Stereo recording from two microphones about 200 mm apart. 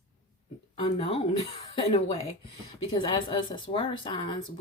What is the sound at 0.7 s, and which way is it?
Speech, 30° left (ahead or behind).